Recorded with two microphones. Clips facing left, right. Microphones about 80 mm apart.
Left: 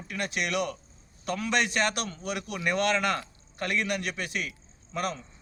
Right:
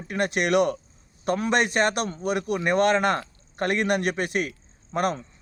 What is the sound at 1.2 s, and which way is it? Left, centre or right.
Speech, right.